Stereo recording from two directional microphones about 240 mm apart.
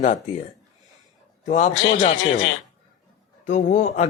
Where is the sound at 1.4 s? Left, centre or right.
Left.